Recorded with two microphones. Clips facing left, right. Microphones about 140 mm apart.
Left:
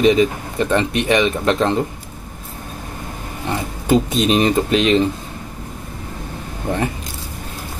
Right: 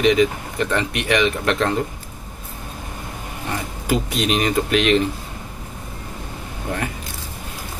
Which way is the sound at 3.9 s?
25° left (ahead or behind).